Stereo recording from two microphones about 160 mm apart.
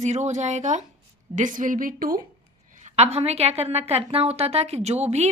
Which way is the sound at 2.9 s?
40° right (ahead or behind).